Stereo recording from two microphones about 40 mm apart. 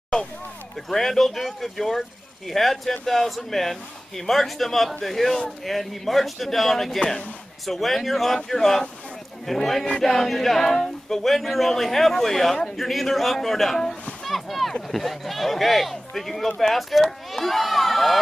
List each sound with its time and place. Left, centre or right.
0.8 s speech: centre
7.0 s speech: centre
7.6 s a man's voice: centre
14.2 s boat: centre
14.7 s speech: centre